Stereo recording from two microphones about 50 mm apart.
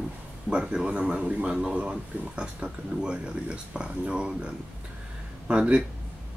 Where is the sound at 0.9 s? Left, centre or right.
Right.